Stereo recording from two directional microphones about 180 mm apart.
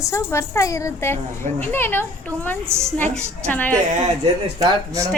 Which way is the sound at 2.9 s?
10° left (ahead or behind).